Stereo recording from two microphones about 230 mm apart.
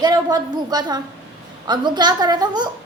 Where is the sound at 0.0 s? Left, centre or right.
Centre.